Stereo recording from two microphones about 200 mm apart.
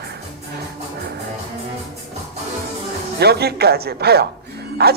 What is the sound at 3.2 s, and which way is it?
Speech, 55° right (ahead or behind).